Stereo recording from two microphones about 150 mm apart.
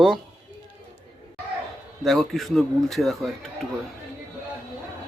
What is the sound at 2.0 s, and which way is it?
A man's voice, centre (ahead or behind).